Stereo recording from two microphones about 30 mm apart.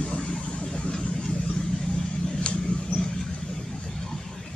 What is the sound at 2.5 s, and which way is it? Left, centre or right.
Mouse, left.